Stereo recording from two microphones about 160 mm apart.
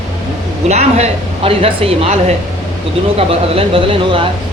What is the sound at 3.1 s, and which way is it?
Speech, 35° right (ahead or behind).